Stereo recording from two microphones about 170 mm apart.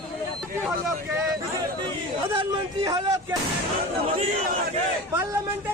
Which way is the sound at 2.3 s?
30° right (ahead or behind).